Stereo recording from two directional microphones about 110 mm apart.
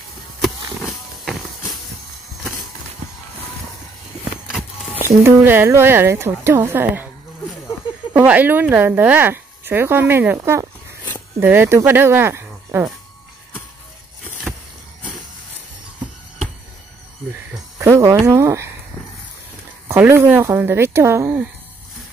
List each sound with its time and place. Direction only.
0.8 s a sound: centre (ahead or behind)
4.2 s vehicle: 5° right (ahead or behind)
5.0 s speech: 20° right (ahead or behind)
8.1 s speech: 15° right (ahead or behind)
17.7 s music: 25° right (ahead or behind)
18.2 s speech: 25° right (ahead or behind)
19.9 s speech: 20° right (ahead or behind)